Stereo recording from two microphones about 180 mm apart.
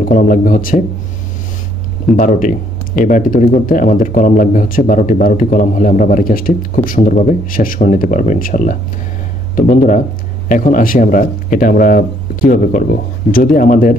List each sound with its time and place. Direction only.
0.1 s speech: 50° left (ahead or behind)
2.1 s speech: 45° left (ahead or behind)